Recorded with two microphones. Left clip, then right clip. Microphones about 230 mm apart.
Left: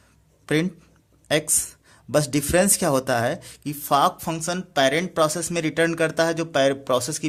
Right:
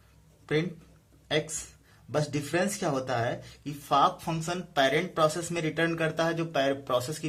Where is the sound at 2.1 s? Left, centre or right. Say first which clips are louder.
Left 9 dB; left.